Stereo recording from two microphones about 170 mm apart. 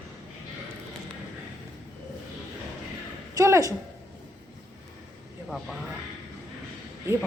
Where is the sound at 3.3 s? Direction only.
20° right (ahead or behind).